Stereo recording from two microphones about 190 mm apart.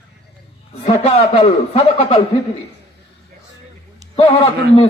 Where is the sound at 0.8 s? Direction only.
30° left (ahead or behind).